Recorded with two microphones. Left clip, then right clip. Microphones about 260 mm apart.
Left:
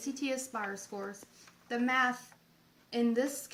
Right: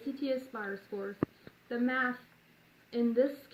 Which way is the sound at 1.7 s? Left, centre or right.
Centre.